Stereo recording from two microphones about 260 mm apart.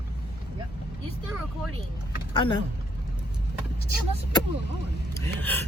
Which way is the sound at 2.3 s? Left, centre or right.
Centre.